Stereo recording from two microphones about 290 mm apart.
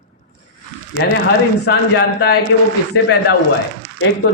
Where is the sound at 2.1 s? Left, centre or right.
Left.